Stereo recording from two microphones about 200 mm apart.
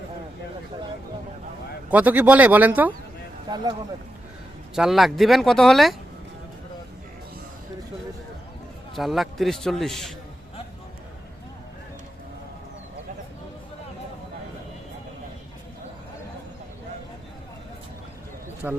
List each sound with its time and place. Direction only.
1.9 s speech: 10° right (ahead or behind)
3.5 s speech: 20° right (ahead or behind)
4.7 s speech: centre (ahead or behind)
9.0 s speech: centre (ahead or behind)
18.6 s speech: 5° right (ahead or behind)